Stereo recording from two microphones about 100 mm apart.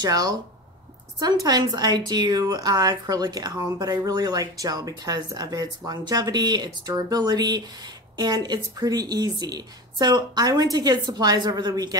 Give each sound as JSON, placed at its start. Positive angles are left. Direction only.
{"t": 0.0, "sound": "a woman's voice", "side_deg": -40}
{"t": 1.4, "sound": "a woman's voice", "side_deg": -40}